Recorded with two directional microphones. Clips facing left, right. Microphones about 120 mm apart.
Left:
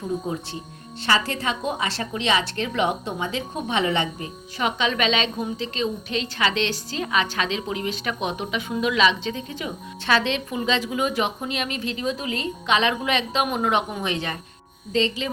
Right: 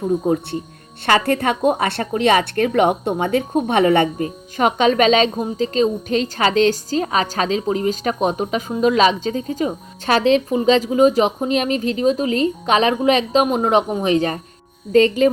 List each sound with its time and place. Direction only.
0.0 s a woman's voice: 50° right (ahead or behind)